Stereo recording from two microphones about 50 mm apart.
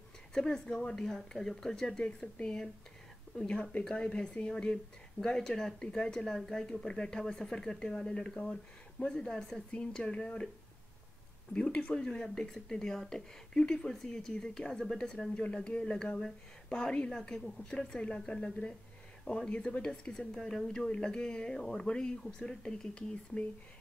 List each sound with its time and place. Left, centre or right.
0.3 s speech: centre
3.9 s speech: centre
11.5 s speech: left